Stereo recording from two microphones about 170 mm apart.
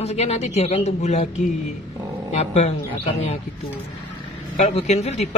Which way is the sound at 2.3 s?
40° left (ahead or behind).